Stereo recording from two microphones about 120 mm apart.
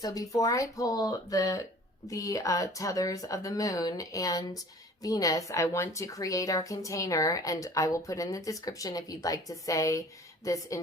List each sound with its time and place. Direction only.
0.0 s a woman's voice: 30° left (ahead or behind)